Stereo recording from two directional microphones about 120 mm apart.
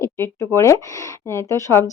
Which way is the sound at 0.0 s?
25° left (ahead or behind).